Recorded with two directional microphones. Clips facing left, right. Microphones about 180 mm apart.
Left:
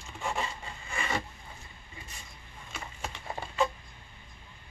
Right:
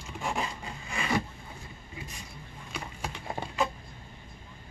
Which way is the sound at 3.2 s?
10° right (ahead or behind).